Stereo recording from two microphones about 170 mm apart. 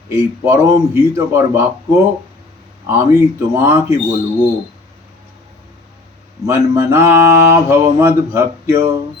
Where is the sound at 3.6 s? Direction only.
15° right (ahead or behind).